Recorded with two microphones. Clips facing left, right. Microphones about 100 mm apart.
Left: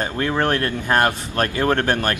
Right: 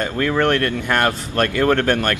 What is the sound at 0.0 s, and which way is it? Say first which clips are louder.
Speech: right 2 dB; 25° left (ahead or behind).